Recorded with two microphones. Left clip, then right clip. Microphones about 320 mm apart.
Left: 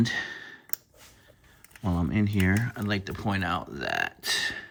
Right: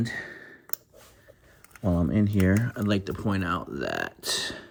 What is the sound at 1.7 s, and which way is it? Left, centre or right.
Speech, centre.